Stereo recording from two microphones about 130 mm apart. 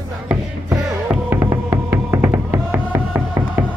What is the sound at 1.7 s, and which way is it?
Music, 20° right (ahead or behind).